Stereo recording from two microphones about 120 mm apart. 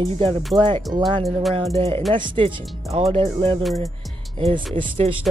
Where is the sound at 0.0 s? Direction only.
50° right (ahead or behind).